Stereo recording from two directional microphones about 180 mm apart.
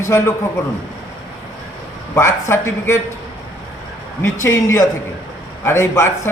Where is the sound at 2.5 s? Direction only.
15° left (ahead or behind).